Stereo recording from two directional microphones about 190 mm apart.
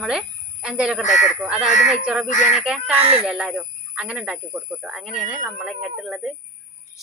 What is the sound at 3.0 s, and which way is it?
Speech, 30° right (ahead or behind).